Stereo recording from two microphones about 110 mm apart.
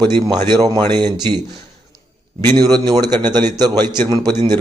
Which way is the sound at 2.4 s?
40° right (ahead or behind).